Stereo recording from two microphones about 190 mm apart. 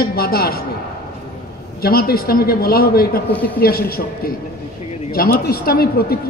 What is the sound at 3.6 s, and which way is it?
A man's voice, 50° left (ahead or behind).